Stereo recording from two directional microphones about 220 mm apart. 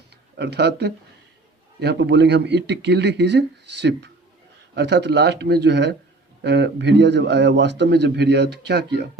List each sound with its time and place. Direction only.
0.3 s a man's voice: 50° right (ahead or behind)